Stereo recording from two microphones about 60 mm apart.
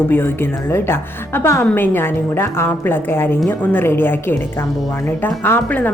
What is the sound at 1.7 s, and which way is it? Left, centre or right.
A woman's voice, left.